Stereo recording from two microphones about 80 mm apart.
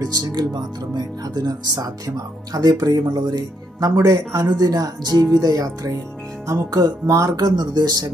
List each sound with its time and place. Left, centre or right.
0.0 s speech: right
7.3 s speech: right